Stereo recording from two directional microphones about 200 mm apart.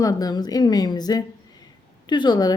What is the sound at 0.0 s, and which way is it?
A woman's voice, 20° left (ahead or behind).